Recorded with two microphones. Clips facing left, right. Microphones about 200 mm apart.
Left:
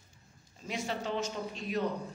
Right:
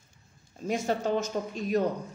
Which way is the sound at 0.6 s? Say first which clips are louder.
Right 8 dB; 45° right (ahead or behind).